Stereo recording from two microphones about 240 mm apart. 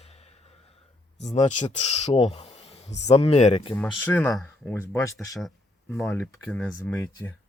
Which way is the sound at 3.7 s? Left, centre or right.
Centre.